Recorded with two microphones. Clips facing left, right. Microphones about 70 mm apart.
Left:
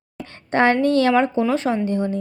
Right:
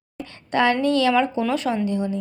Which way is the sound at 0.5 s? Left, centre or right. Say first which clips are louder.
Left 3 dB; left.